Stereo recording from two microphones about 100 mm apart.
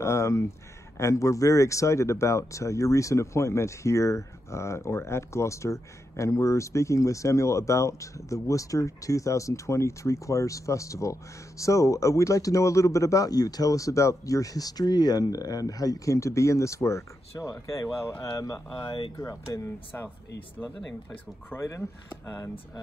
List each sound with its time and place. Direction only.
0.0 s a sound: 30° left (ahead or behind)
0.9 s speech: 30° left (ahead or behind)
19.9 s speech: 20° left (ahead or behind)
21.5 s speech: 30° left (ahead or behind)